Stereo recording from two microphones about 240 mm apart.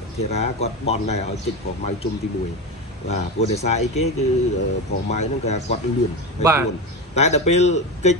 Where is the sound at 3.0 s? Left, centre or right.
Left.